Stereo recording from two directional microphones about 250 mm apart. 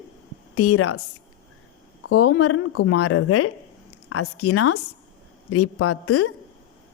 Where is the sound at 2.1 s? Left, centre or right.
Left.